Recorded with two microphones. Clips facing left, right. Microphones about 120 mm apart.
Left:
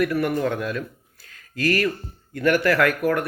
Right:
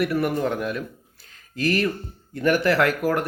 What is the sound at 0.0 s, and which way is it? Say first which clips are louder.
Speech: left 1 dB; 30° right (ahead or behind).